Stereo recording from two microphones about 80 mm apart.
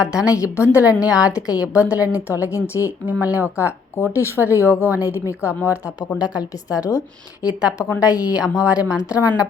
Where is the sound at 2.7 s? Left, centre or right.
Right.